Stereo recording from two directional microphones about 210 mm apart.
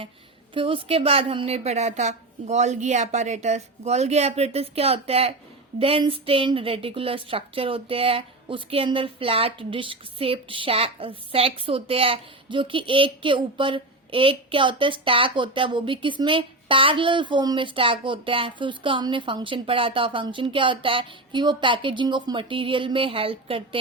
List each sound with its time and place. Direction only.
0.5 s a woman's voice: 25° right (ahead or behind)